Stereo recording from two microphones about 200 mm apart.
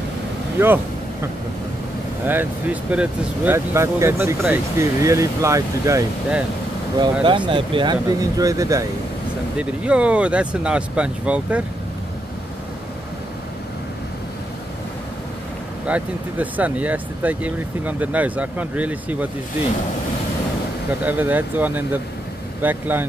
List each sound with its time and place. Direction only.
0.6 s speech: 10° right (ahead or behind)
2.2 s speech: 10° right (ahead or behind)
9.6 s speech: 5° right (ahead or behind)
15.9 s speech: 10° right (ahead or behind)
21.0 s speech: 10° right (ahead or behind)